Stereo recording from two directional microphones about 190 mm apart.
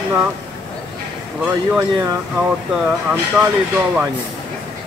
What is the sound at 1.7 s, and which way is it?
Speech, 5° right (ahead or behind).